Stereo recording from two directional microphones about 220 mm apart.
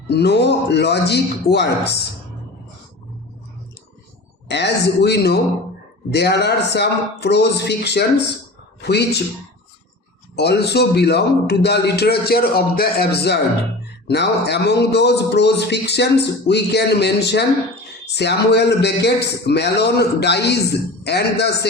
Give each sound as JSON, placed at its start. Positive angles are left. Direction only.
{"t": 0.1, "sound": "a man's voice", "side_deg": 50}
{"t": 4.4, "sound": "a man's voice", "side_deg": 50}
{"t": 10.3, "sound": "a man's voice", "side_deg": 50}